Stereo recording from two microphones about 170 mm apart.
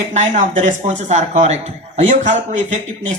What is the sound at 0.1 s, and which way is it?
Speech, 45° right (ahead or behind).